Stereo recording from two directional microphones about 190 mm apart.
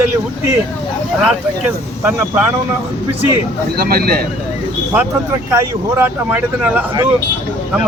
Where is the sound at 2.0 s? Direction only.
10° right (ahead or behind).